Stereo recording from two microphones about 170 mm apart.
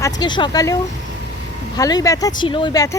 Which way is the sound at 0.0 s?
25° left (ahead or behind).